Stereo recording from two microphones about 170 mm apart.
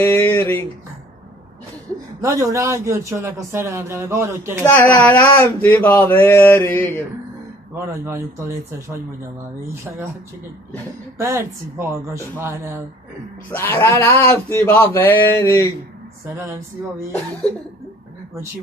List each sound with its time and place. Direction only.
0.1 s speech: 15° left (ahead or behind)
2.2 s speech: 20° right (ahead or behind)
4.6 s speech: 10° left (ahead or behind)
7.7 s speech: 15° right (ahead or behind)
11.1 s speech: 15° right (ahead or behind)
13.5 s speech: 10° left (ahead or behind)